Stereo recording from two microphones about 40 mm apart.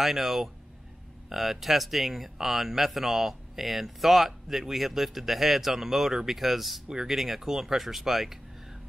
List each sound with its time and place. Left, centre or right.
0.0 s speech: centre